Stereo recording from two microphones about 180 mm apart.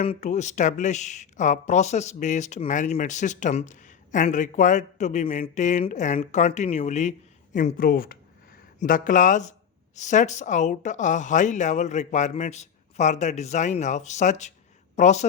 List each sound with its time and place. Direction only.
0.0 s speech: 35° left (ahead or behind)